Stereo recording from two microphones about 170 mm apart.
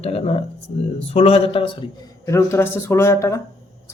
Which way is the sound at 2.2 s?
15° left (ahead or behind).